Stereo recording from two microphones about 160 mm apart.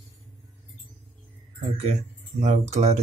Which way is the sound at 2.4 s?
45° right (ahead or behind).